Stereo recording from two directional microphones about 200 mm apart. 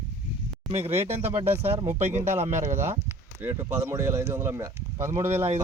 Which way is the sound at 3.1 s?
10° right (ahead or behind).